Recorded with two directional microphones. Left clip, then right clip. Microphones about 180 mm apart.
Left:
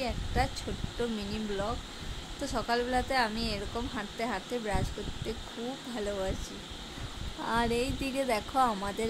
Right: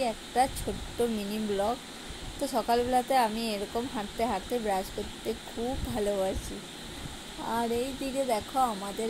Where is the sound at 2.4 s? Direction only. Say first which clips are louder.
Right 4 dB; 15° right (ahead or behind).